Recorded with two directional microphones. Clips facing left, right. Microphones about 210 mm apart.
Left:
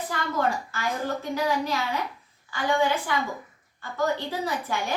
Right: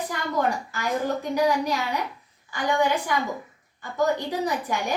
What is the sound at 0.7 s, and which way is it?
A woman's voice, 15° right (ahead or behind).